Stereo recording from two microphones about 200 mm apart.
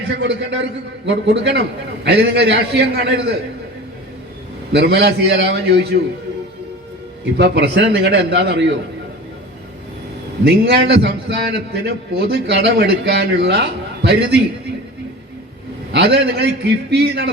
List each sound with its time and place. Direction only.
0.2 s a man's voice: 60° right (ahead or behind)
4.7 s a man's voice: 60° right (ahead or behind)
7.3 s a man's voice: 60° right (ahead or behind)
10.4 s a man's voice: 55° right (ahead or behind)
15.9 s a man's voice: 60° right (ahead or behind)